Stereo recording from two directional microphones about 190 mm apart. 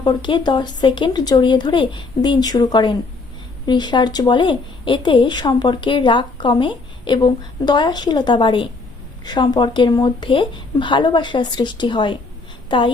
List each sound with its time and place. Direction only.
0.0 s a woman's voice: 25° left (ahead or behind)